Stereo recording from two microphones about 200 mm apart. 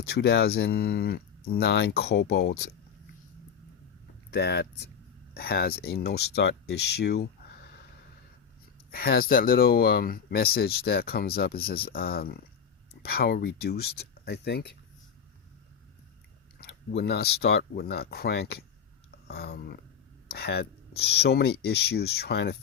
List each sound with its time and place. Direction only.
0.1 s speech: 55° left (ahead or behind)
4.3 s speech: 55° left (ahead or behind)
8.9 s speech: 50° left (ahead or behind)
16.6 s speech: 55° left (ahead or behind)